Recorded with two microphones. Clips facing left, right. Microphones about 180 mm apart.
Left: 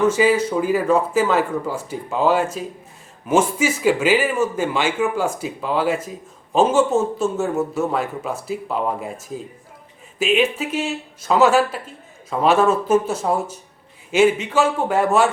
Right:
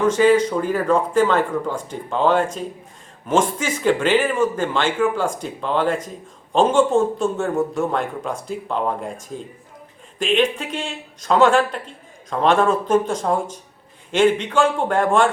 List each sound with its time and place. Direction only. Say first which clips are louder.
0.0 s speech: right 1 dB; 5° left (ahead or behind)